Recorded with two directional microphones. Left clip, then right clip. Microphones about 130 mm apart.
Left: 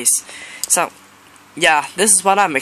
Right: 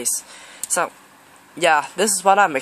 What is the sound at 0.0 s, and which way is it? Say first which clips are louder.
Speech: left 5 dB; centre (ahead or behind).